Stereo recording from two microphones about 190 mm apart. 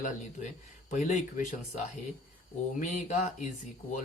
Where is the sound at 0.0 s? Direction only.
40° left (ahead or behind).